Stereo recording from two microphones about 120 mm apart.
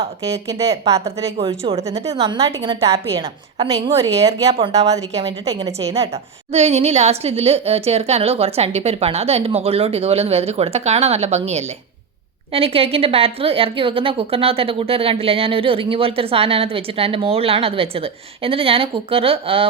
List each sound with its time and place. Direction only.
0.2 s speech: 25° right (ahead or behind)
1.4 s a woman's voice: 55° right (ahead or behind)
2.1 s a woman's voice: 35° right (ahead or behind)
4.1 s speech: 30° right (ahead or behind)
5.5 s a woman's voice: 30° right (ahead or behind)
6.5 s a woman's voice: 65° right (ahead or behind)
12.5 s a woman's voice: 50° right (ahead or behind)